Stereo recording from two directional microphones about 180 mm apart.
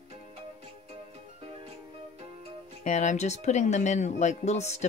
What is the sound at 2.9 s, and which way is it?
Speech, 40° left (ahead or behind).